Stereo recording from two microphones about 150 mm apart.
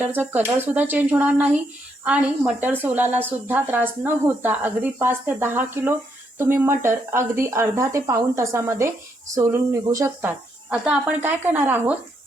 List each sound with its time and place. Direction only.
0.0 s speech: 15° right (ahead or behind)